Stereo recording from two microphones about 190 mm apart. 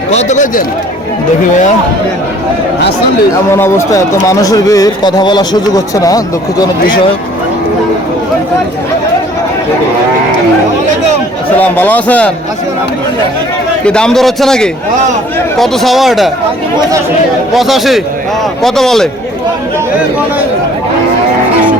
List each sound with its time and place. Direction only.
0.1 s a man's voice: 35° left (ahead or behind)
3.5 s speech: 15° left (ahead or behind)
11.6 s speech: 10° left (ahead or behind)
13.8 s a man's voice: 5° left (ahead or behind)
17.5 s a man's voice: centre (ahead or behind)